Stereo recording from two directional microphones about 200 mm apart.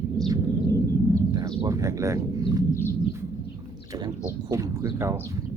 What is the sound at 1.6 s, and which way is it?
Speech, 15° right (ahead or behind).